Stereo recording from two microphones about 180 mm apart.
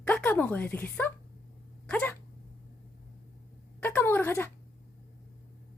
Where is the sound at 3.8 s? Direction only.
10° left (ahead or behind).